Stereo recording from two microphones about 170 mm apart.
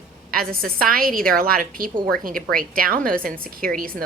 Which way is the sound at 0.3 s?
60° right (ahead or behind).